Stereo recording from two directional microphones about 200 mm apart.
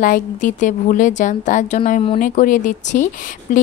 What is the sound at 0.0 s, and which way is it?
Speech, 40° left (ahead or behind).